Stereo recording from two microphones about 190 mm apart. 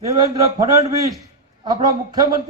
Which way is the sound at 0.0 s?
15° right (ahead or behind).